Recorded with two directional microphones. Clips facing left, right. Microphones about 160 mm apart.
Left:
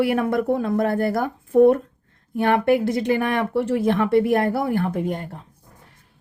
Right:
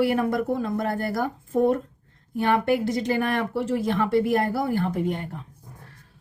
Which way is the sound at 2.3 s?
55° left (ahead or behind).